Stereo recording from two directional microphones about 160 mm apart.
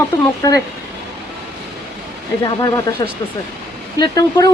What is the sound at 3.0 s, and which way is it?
A woman's voice, 25° left (ahead or behind).